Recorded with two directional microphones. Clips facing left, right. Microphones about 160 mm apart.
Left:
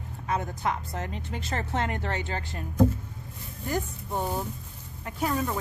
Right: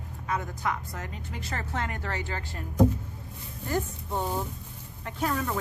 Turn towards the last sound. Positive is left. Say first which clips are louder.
# left 1 dB
turn(degrees=10)  # may be behind; listen again after turning